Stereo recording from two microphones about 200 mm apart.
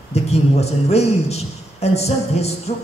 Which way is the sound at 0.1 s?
30° left (ahead or behind).